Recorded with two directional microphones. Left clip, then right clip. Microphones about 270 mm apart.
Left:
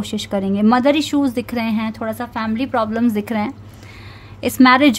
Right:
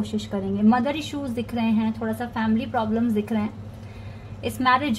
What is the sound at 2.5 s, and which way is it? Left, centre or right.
Speech, left.